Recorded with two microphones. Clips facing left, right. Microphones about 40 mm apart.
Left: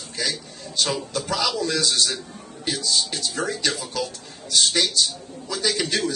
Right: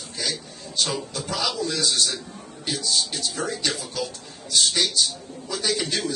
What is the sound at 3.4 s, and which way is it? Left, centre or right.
Speech, left.